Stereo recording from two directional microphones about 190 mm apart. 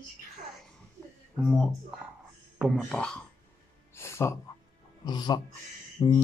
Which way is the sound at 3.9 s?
15° left (ahead or behind).